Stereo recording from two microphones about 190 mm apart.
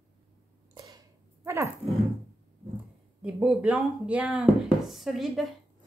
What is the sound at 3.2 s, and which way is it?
Speech, 5° right (ahead or behind).